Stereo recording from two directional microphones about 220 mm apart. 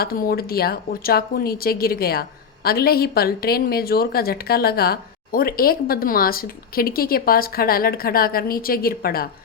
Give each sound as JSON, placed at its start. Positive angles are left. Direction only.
{"t": 0.0, "sound": "a woman's voice", "side_deg": 45}